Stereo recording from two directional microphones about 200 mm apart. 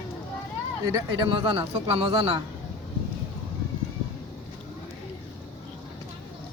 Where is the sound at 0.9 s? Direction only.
20° right (ahead or behind).